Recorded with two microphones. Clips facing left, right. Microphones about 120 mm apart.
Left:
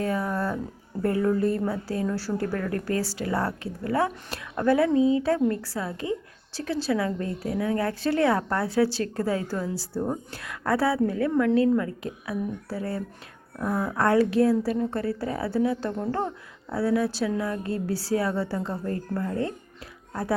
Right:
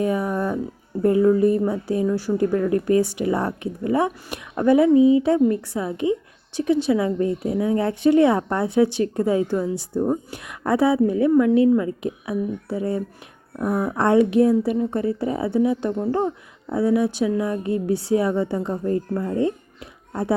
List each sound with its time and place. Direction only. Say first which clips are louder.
0.0 s music: right 5 dB; 15° right (ahead or behind)
1.0 s a woman's voice: right 7 dB; 20° right (ahead or behind)